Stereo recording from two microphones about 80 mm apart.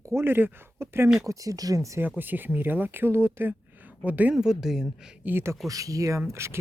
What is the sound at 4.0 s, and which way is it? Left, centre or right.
Speech, centre.